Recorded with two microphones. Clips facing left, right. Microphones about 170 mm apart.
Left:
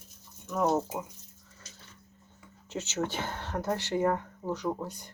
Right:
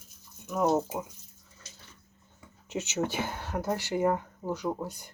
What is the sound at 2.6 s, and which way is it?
Speech, 15° right (ahead or behind).